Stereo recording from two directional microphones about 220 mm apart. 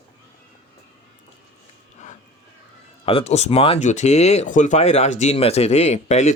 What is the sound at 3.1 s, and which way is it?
Speech, 25° left (ahead or behind).